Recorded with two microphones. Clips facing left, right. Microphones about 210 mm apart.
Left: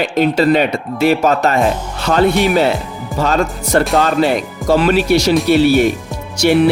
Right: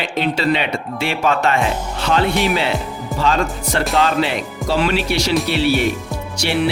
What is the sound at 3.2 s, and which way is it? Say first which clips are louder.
Speech: left 3 dB; 45° left (ahead or behind).